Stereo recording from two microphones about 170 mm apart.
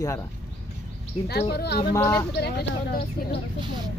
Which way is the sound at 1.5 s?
70° left (ahead or behind).